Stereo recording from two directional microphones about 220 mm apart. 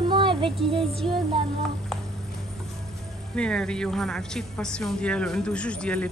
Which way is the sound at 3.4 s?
5° left (ahead or behind).